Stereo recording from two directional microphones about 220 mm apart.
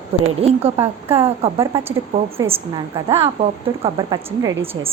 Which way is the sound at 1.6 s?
10° right (ahead or behind).